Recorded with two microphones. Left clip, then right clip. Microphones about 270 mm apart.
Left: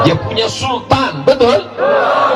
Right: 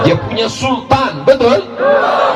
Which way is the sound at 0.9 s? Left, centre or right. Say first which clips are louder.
Right 2 dB; left.